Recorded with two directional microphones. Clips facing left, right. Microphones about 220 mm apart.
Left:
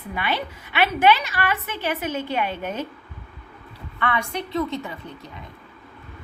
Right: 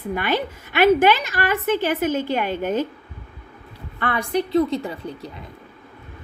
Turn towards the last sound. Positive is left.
turn(degrees=-35)  # may be behind; listen again after turning